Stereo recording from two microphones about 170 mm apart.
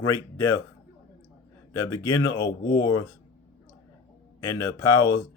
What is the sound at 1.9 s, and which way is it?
A man's voice, 15° left (ahead or behind).